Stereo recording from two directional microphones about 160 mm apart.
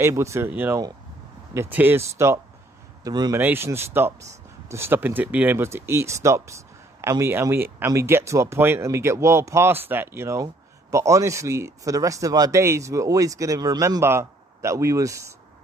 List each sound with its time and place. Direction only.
0.0 s speech: 20° right (ahead or behind)
3.3 s speech: 15° right (ahead or behind)